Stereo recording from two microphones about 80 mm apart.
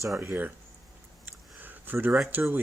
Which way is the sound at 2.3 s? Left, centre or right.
Right.